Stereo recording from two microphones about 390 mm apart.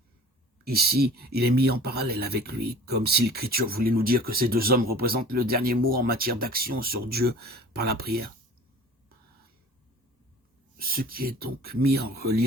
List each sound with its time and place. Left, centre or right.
0.6 s speech: right
10.8 s speech: right